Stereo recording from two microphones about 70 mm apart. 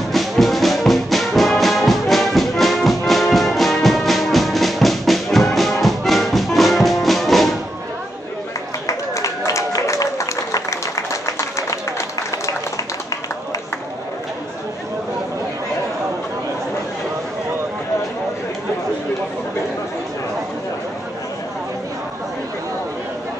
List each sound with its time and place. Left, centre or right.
0.1 s music: centre
8.8 s applause: left